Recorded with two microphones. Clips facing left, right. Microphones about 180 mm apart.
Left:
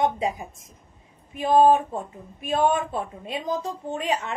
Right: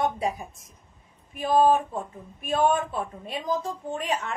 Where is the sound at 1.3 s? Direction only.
20° left (ahead or behind).